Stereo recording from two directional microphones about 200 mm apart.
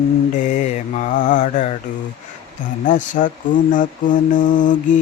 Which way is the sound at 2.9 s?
40° left (ahead or behind).